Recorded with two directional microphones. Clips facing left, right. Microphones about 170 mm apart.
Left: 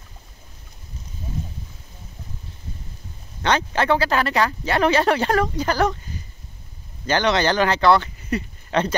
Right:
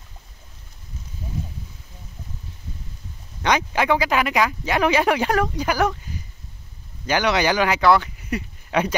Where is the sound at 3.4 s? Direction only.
10° right (ahead or behind).